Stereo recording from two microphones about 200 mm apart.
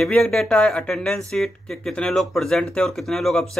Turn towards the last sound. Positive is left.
turn(degrees=0)  # may be behind; listen again after turning